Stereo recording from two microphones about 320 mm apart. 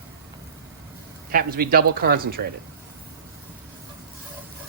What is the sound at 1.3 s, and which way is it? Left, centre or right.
A man's voice, right.